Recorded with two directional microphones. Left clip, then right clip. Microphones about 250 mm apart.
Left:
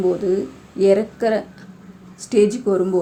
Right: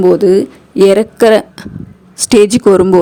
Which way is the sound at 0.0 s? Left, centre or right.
Right.